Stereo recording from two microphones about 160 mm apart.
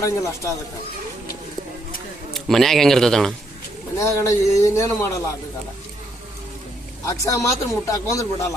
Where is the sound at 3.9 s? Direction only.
20° left (ahead or behind).